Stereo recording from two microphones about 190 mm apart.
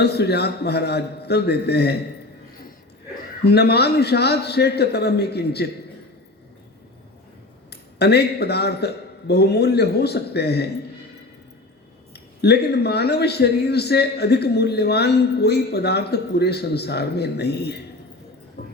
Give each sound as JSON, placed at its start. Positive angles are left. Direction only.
{"t": 0.0, "sound": "a man's voice", "side_deg": 60}
{"t": 3.4, "sound": "a man's voice", "side_deg": 60}
{"t": 7.7, "sound": "a man's voice", "side_deg": 60}
{"t": 12.1, "sound": "a man's voice", "side_deg": 60}
{"t": 18.6, "sound": "a sound", "side_deg": 55}